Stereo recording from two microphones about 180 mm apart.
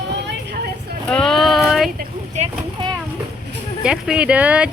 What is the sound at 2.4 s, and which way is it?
Speech, 40° right (ahead or behind).